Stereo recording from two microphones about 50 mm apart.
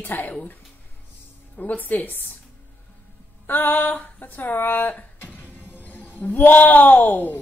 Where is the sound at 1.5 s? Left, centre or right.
Left.